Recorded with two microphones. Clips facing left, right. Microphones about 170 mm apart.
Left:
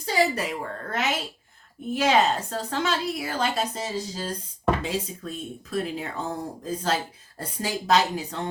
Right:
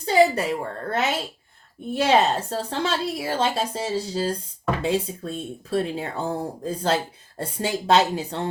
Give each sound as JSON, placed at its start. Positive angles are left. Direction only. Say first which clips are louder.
{"t": 0.0, "sound": "a woman's voice", "louder": "right 6 dB", "side_deg": -30}